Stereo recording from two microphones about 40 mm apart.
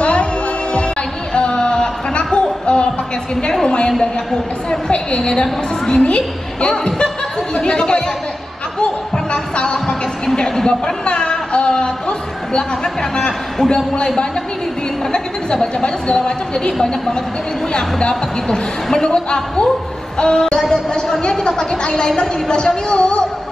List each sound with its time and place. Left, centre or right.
0.0 s music: left
1.3 s a sound: left
3.6 s a woman's voice: centre
10.7 s a sound: left
13.9 s a woman's voice: left
17.7 s a woman's voice: centre
20.2 s music: left
20.7 s a woman's voice: centre